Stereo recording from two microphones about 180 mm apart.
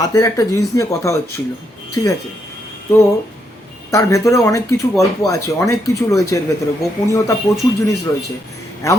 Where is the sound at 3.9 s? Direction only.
15° left (ahead or behind).